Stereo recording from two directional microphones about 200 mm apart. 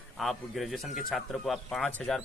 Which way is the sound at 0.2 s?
Centre (ahead or behind).